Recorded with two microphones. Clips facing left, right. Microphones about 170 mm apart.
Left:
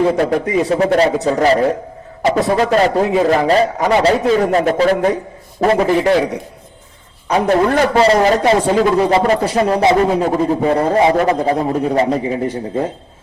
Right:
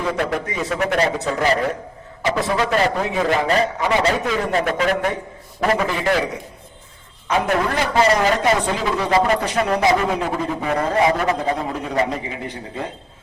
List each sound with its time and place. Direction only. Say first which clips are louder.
0.0 s a man's voice: left 8 dB; 30° left (ahead or behind)
7.3 s a man's voice: left 6 dB; 35° left (ahead or behind)
8.5 s speech: left 8 dB; 45° left (ahead or behind)
9.1 s a man's voice: left 4 dB; 30° left (ahead or behind)